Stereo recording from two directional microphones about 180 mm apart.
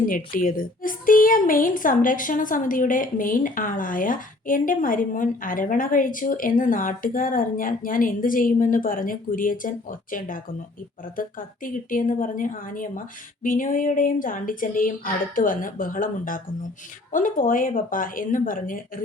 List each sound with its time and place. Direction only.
0.1 s a woman's voice: 50° left (ahead or behind)